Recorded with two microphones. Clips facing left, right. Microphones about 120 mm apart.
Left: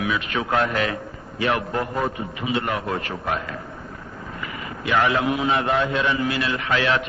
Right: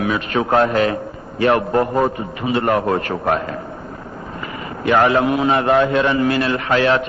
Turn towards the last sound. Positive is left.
turn(degrees=-40)  # may be behind; listen again after turning